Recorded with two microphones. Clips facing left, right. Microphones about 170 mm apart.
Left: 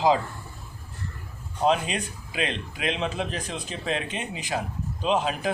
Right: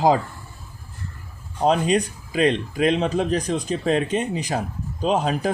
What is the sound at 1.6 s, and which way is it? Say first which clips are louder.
Speech: right 5 dB; 40° right (ahead or behind).